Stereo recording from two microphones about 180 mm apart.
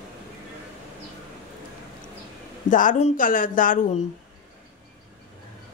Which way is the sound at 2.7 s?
45° left (ahead or behind).